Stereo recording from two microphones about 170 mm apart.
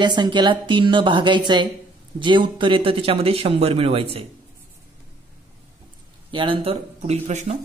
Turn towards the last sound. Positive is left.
turn(degrees=-40)  # may be behind; listen again after turning